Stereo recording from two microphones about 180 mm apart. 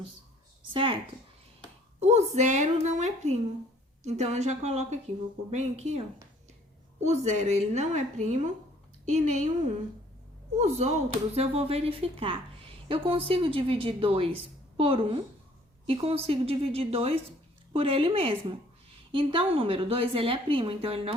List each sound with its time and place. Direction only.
0.7 s speech: 30° right (ahead or behind)
2.0 s a woman's voice: 40° right (ahead or behind)
7.0 s a woman's voice: 40° right (ahead or behind)
10.6 s a woman's voice: 40° right (ahead or behind)